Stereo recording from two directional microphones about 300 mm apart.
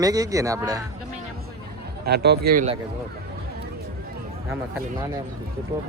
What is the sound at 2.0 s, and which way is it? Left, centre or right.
Speech, right.